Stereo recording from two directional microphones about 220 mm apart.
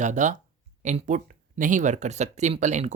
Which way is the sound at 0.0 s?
35° right (ahead or behind).